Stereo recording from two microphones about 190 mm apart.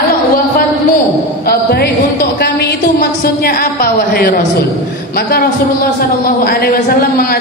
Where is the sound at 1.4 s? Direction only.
55° left (ahead or behind).